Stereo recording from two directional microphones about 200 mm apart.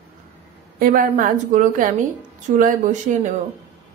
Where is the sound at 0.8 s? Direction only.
45° right (ahead or behind).